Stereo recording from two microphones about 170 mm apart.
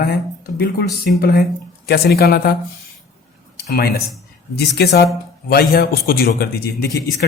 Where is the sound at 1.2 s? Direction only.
70° left (ahead or behind).